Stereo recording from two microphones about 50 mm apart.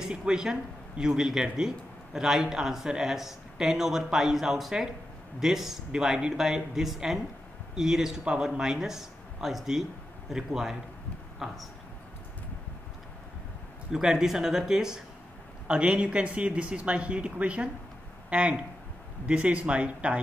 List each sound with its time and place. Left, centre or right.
0.0 s speech: centre
13.9 s speech: centre; by 20.2 s right